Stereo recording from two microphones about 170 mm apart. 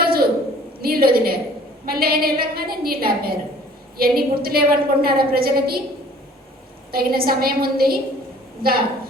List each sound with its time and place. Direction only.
0.0 s a sound: 60° right (ahead or behind)
0.8 s a woman's voice: 60° right (ahead or behind)
6.9 s a woman's voice: 60° right (ahead or behind)